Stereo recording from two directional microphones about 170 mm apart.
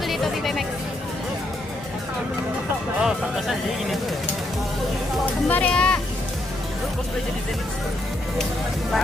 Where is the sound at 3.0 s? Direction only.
Centre (ahead or behind).